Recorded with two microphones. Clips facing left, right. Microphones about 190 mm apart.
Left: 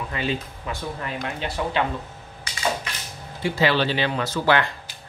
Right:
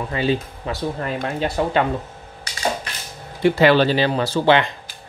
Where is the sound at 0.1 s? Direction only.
35° right (ahead or behind).